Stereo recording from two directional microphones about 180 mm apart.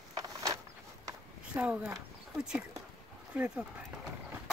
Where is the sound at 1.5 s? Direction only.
5° right (ahead or behind).